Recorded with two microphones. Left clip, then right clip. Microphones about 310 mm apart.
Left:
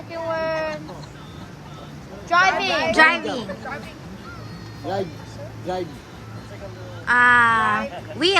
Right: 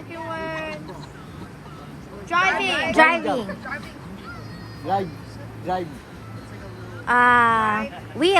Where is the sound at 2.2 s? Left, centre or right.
Left.